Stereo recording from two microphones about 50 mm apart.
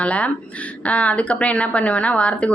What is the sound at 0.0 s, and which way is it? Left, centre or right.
A woman's voice, left.